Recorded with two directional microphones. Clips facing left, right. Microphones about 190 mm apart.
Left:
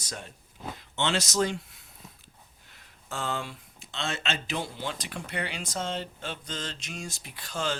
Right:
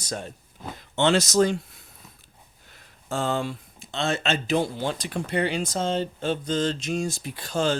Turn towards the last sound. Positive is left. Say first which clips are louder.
# right 8 dB
turn(degrees=-35)  # may be behind; listen again after turning